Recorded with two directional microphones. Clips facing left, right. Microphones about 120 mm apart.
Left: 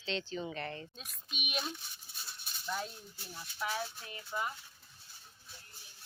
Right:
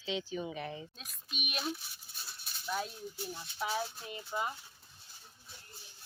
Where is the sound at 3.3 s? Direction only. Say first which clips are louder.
Right 1 dB; 20° right (ahead or behind).